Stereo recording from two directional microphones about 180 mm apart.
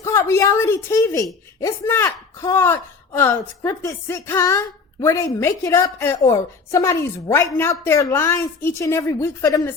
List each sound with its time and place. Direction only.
0.0 s a woman's voice: 15° left (ahead or behind)